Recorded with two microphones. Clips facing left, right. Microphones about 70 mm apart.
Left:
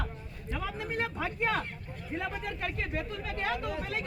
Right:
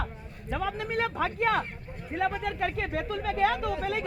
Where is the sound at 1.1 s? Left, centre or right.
Right.